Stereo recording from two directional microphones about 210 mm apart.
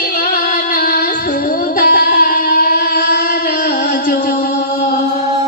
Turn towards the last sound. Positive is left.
turn(degrees=45)  # may be behind; listen again after turning